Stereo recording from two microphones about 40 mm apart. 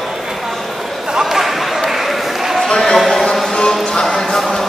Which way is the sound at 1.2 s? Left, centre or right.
Centre.